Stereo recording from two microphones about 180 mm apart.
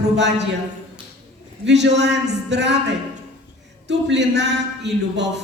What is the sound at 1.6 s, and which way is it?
A man's voice, 75° right (ahead or behind).